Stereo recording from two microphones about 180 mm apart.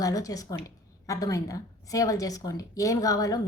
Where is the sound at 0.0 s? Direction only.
20° left (ahead or behind).